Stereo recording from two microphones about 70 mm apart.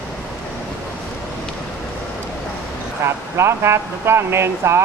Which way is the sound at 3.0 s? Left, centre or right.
Right.